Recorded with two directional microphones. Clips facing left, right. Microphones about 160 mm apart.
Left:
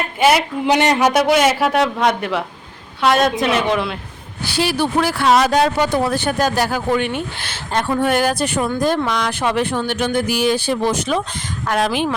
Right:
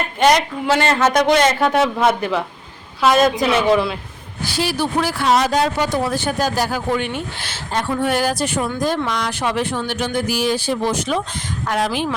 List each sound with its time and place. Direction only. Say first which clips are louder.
0.2 s a man's voice: even; 5° left (ahead or behind)
0.6 s a man's voice: left 2 dB; 15° left (ahead or behind); by 3.9 s centre (ahead or behind)
4.4 s speech: left 2 dB; 65° left (ahead or behind)